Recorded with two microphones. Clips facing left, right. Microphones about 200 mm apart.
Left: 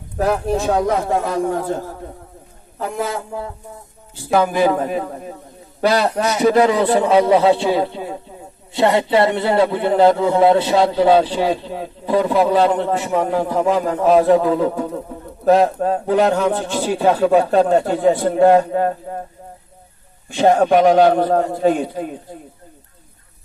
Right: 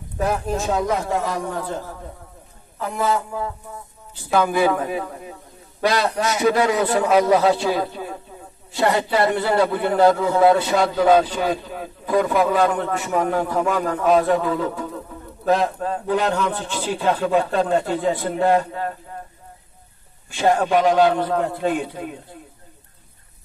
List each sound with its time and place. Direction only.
0.2 s a man's voice: 60° left (ahead or behind)
4.3 s a man's voice: 35° left (ahead or behind)
6.2 s a man's voice: 30° left (ahead or behind)
15.6 s speech: 50° left (ahead or behind)
20.3 s speech: 50° left (ahead or behind)